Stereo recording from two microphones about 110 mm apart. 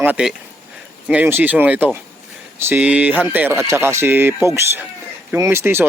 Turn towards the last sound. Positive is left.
turn(degrees=-20)  # may be behind; listen again after turning